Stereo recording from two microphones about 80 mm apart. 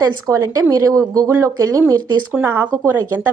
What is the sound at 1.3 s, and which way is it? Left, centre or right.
Speech, right.